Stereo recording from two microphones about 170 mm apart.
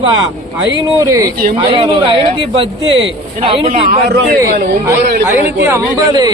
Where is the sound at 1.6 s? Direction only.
30° right (ahead or behind).